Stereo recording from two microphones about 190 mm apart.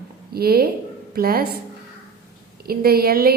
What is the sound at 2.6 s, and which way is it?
Speech, 55° right (ahead or behind).